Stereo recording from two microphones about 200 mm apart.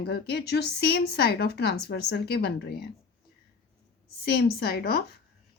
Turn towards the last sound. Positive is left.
turn(degrees=55)  # may be behind; listen again after turning